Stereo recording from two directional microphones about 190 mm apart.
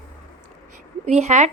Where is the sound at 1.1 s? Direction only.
35° right (ahead or behind).